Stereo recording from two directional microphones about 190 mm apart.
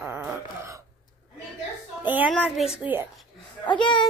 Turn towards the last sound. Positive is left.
turn(degrees=25)  # may be behind; listen again after turning